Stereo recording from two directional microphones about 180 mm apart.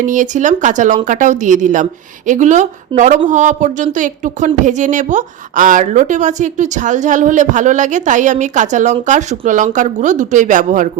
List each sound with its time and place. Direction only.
0.0 s speech: 45° right (ahead or behind)